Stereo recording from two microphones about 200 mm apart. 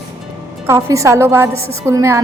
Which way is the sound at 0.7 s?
15° right (ahead or behind).